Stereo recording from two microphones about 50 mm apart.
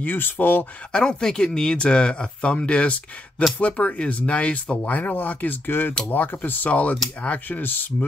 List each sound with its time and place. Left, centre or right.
0.0 s speech: left
0.9 s speech: centre; by 5.6 s left
5.7 s speech: left